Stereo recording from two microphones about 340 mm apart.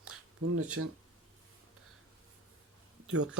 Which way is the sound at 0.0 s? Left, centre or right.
Right.